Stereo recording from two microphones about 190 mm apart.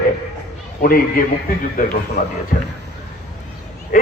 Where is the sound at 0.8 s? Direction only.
50° left (ahead or behind).